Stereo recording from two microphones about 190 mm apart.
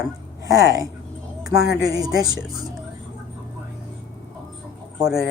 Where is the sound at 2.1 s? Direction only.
20° right (ahead or behind).